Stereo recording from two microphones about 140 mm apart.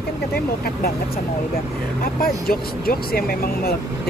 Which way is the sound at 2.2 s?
90° left.